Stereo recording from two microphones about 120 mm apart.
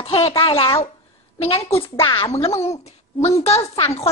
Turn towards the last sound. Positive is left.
turn(degrees=60)  # may be behind; listen again after turning